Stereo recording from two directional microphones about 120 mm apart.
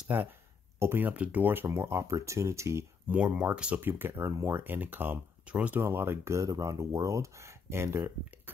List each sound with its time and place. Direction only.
0.1 s speech: 15° right (ahead or behind)
3.2 s speech: 10° right (ahead or behind)